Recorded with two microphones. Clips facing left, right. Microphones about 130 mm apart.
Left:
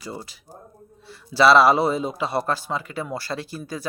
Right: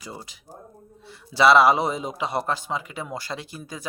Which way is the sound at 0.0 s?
15° right (ahead or behind).